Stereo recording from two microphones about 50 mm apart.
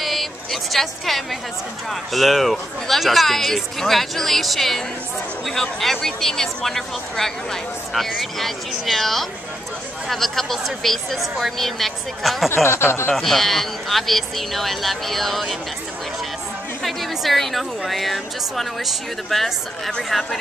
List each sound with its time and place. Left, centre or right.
0.0 s a sound: centre
1.9 s speech: centre
12.6 s speech: left
13.1 s speech: centre
16.8 s speech: centre